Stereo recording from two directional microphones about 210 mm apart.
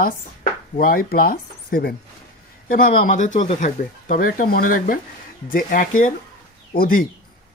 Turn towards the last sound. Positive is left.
turn(degrees=45)  # may be behind; listen again after turning